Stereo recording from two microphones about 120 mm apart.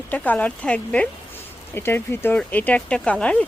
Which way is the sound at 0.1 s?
10° left (ahead or behind).